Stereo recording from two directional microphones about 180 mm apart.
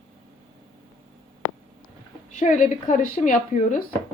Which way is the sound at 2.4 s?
45° left (ahead or behind).